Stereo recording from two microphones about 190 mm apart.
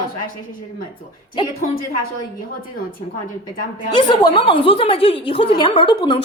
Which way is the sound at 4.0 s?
25° left (ahead or behind).